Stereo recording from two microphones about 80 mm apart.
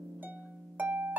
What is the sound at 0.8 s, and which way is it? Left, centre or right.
Harp, right.